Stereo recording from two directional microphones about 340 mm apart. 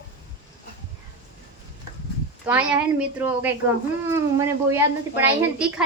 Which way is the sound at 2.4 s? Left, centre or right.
Centre.